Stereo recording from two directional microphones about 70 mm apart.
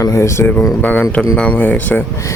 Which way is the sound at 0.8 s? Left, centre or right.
Left.